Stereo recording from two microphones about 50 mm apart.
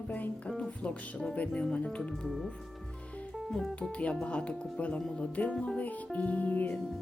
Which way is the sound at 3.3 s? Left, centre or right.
Centre.